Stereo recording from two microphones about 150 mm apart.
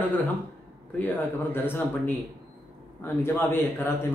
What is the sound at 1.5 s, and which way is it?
Speech, 15° left (ahead or behind).